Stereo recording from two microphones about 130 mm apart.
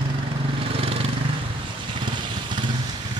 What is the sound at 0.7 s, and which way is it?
Vehicle, 45° right (ahead or behind).